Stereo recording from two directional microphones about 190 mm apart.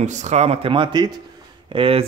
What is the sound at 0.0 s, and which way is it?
A man's voice, 40° right (ahead or behind).